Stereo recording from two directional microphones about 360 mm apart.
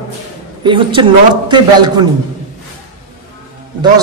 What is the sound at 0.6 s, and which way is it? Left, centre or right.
Speech, centre.